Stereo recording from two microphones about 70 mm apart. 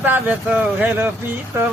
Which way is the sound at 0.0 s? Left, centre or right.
Right.